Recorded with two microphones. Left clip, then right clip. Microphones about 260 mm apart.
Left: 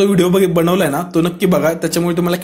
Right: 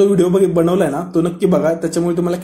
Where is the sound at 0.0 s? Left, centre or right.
Left.